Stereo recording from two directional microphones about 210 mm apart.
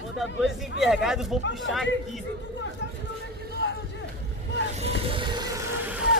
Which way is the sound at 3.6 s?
60° left (ahead or behind).